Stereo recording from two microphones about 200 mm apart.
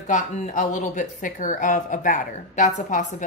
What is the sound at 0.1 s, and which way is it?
A woman's voice, 40° left (ahead or behind).